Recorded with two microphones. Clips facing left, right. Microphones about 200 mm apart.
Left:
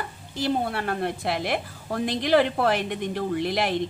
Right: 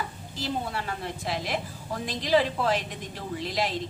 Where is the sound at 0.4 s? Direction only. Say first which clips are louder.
Left 6 dB; 60° left (ahead or behind).